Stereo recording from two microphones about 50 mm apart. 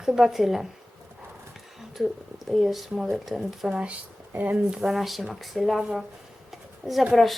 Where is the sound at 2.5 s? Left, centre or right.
Centre.